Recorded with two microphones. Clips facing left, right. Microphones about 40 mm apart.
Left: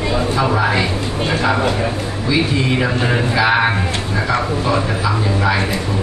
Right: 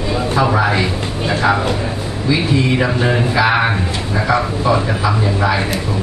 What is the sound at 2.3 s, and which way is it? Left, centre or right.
Speech, centre.